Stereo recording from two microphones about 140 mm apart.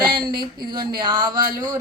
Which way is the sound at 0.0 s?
35° right (ahead or behind).